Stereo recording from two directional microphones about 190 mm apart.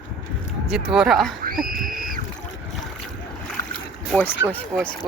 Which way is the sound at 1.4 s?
50° right (ahead or behind).